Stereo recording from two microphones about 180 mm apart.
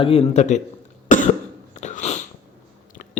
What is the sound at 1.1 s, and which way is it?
Cough, 45° left (ahead or behind).